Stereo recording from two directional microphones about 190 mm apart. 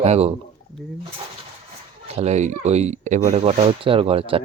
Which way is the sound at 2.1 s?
35° right (ahead or behind).